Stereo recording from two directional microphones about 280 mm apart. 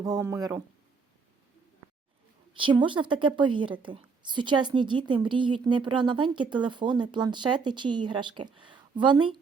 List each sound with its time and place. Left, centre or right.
0.0 s a woman's voice: centre
2.6 s a woman's voice: centre